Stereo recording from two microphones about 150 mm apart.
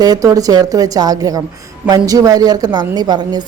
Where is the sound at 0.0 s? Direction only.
25° right (ahead or behind).